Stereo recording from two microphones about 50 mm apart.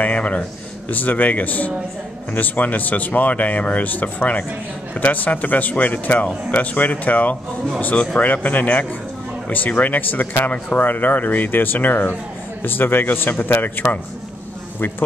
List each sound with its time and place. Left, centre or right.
0.0 s a man's voice: left